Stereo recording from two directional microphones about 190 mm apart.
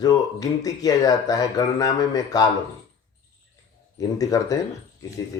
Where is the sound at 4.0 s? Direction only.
20° left (ahead or behind).